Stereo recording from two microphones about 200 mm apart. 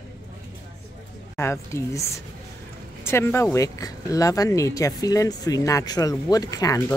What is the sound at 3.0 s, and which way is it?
A woman's voice, 10° left (ahead or behind).